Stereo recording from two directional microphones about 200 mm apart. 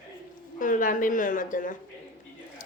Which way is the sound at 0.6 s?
40° left (ahead or behind).